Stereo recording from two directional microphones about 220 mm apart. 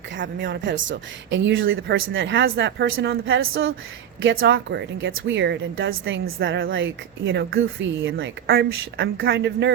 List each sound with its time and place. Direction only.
0.2 s a woman's voice: 55° right (ahead or behind)